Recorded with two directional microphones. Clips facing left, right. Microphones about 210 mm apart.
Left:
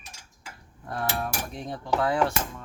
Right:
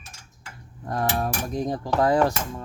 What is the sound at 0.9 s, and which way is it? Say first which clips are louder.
Cutlery: right 5 dB; 40° right (ahead or behind).